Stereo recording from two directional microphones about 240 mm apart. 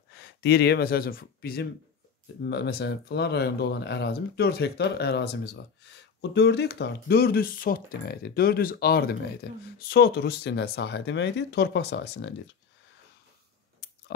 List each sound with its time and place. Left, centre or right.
0.1 s speech: left